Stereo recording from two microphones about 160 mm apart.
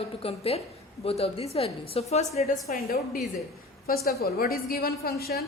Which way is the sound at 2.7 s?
70° left (ahead or behind).